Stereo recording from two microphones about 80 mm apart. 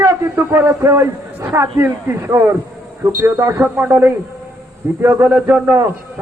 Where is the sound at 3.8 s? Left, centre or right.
Right.